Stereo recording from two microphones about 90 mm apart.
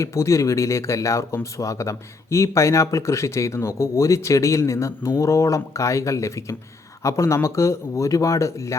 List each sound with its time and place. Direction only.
0.0 s speech: 35° left (ahead or behind)